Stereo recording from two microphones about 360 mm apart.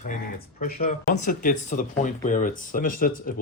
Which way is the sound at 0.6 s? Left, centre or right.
Left.